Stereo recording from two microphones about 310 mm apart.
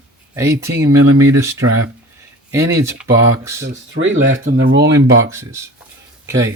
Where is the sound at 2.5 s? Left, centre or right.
Centre.